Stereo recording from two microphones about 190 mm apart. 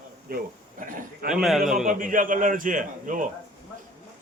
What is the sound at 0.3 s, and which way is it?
Speech, 55° right (ahead or behind).